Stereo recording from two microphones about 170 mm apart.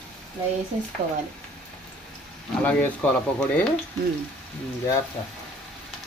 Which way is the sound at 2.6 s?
10° left (ahead or behind).